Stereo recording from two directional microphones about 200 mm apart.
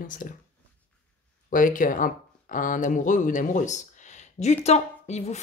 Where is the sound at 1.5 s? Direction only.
40° left (ahead or behind).